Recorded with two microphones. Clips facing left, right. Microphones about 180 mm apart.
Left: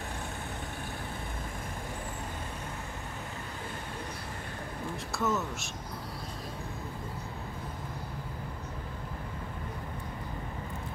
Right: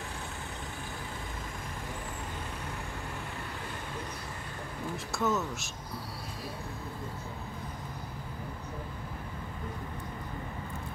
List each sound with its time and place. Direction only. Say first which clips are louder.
5.1 s speech: right 1 dB; centre (ahead or behind)